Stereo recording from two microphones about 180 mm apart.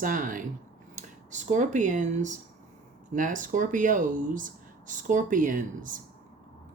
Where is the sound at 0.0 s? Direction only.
50° right (ahead or behind).